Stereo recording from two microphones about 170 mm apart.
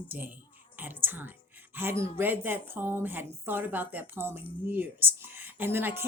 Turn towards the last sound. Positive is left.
turn(degrees=-15)  # may be behind; listen again after turning